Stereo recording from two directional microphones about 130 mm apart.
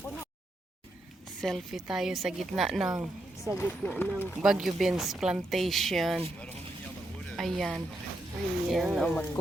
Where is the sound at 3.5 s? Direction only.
20° right (ahead or behind).